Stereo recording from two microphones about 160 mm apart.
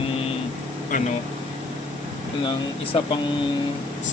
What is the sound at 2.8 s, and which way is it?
Speech, 35° left (ahead or behind).